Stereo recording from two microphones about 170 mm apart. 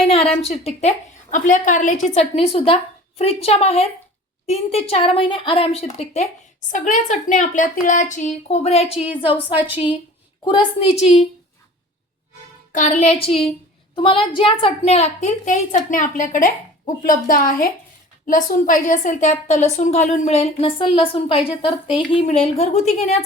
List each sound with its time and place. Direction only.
0.0 s a woman's voice: 35° left (ahead or behind)
2.1 s a woman's voice: 35° left (ahead or behind)
6.7 s a woman's voice: 50° left (ahead or behind)
12.7 s a woman's voice: 45° left (ahead or behind)
22.2 s a woman's voice: 40° left (ahead or behind)